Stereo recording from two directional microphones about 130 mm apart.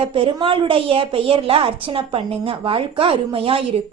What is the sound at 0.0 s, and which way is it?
A woman's voice, 45° right (ahead or behind).